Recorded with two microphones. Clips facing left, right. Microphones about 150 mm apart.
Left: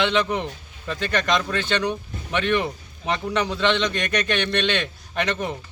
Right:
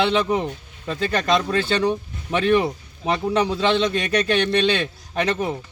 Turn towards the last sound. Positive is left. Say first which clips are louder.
# right 3 dB
turn(degrees=-35)  # may be behind; listen again after turning